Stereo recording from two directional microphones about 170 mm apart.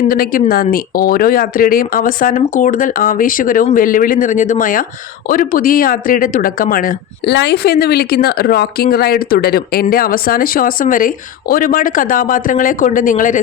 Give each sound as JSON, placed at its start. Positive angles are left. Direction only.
{"t": 0.1, "sound": "speech", "side_deg": 60}